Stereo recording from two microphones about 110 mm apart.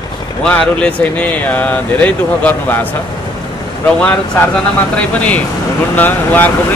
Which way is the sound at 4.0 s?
10° left (ahead or behind).